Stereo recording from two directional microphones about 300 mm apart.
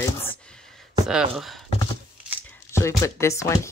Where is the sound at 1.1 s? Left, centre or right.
Centre.